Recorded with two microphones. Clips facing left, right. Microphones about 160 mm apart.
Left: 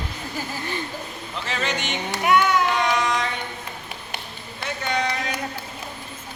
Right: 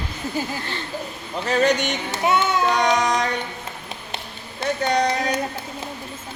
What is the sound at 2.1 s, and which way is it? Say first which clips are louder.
Speech: left 2 dB; 25° right (ahead or behind).